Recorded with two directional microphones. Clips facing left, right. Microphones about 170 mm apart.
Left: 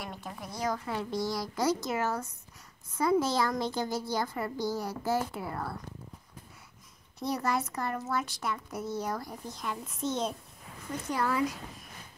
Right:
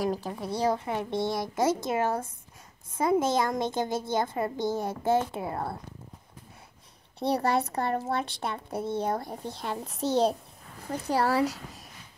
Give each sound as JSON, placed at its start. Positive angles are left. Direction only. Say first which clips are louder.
{"t": 0.0, "sound": "a woman's voice", "louder": "right 11 dB", "side_deg": -35}
{"t": 7.2, "sound": "speech", "louder": "right 5 dB", "side_deg": -30}
{"t": 11.4, "sound": "speech", "louder": "right 3 dB", "side_deg": -85}